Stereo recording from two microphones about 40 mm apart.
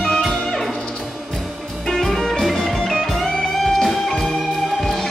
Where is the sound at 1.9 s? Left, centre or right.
Centre.